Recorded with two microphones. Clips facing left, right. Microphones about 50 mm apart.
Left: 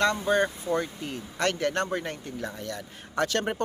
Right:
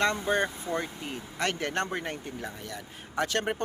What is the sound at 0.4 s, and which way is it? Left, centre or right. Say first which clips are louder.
Speech: left 3 dB; centre.